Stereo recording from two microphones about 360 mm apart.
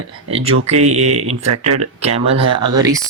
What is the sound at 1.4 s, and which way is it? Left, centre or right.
Speech, right.